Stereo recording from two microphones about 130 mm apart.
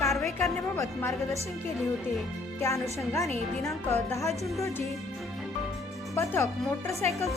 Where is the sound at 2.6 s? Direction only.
25° left (ahead or behind).